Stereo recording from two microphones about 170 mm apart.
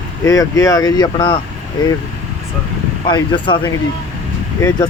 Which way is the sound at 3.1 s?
30° left (ahead or behind).